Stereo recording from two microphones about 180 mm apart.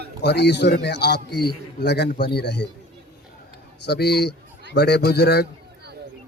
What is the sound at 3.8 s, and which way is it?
A man's voice, 65° left (ahead or behind).